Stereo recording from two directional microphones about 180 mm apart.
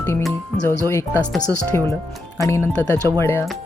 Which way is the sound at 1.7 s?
15° left (ahead or behind).